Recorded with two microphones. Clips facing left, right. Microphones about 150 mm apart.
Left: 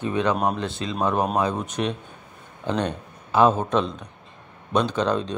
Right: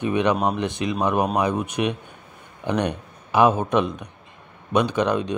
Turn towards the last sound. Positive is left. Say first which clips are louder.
# right 2 dB
turn(degrees=-15)  # may be behind; listen again after turning